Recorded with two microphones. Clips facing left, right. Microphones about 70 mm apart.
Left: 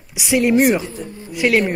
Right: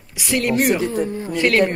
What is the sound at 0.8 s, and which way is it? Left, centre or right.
Speech, right.